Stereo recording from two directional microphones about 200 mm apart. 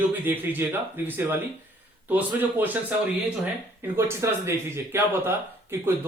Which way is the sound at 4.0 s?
10° right (ahead or behind).